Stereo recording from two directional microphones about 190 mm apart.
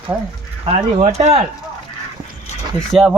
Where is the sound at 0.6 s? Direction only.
30° right (ahead or behind).